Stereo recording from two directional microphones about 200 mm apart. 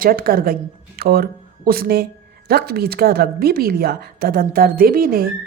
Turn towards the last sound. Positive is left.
turn(degrees=-45)  # may be behind; listen again after turning